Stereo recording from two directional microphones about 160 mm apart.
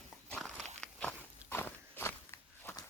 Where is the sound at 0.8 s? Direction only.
5° left (ahead or behind).